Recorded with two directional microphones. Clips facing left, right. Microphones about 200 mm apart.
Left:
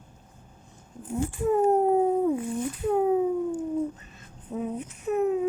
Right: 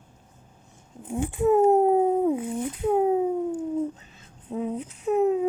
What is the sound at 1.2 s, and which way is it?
Speech, 20° right (ahead or behind).